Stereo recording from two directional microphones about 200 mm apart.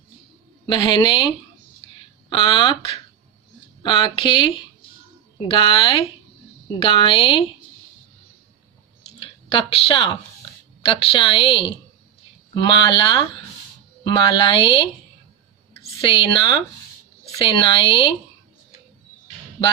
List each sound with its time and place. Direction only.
0.7 s a woman's voice: 20° left (ahead or behind)
2.3 s a woman's voice: 25° left (ahead or behind)
9.1 s a woman's voice: 25° left (ahead or behind)